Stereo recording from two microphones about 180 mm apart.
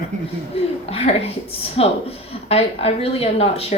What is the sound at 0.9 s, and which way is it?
A woman's voice, 35° left (ahead or behind).